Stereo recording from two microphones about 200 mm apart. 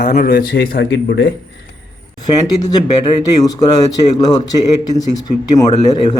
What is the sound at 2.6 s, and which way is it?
Speech, 20° left (ahead or behind).